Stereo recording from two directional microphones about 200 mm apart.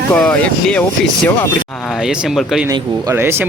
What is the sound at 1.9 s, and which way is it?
Speech, 5° right (ahead or behind).